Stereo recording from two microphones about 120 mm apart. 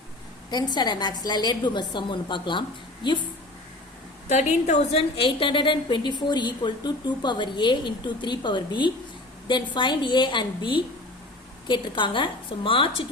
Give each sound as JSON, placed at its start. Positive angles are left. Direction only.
{"t": 0.5, "sound": "a woman's voice", "side_deg": 35}
{"t": 4.3, "sound": "a woman's voice", "side_deg": 75}